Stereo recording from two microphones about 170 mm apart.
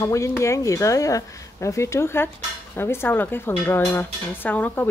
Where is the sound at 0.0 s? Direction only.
15° left (ahead or behind).